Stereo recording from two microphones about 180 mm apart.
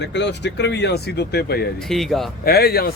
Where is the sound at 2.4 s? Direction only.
60° left (ahead or behind).